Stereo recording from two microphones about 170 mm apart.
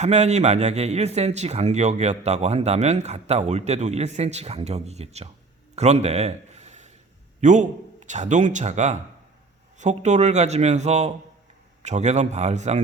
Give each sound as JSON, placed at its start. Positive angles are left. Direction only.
{"t": 0.0, "sound": "a man's voice", "side_deg": -40}
{"t": 5.7, "sound": "a sound", "side_deg": -40}
{"t": 7.4, "sound": "a man's voice", "side_deg": -45}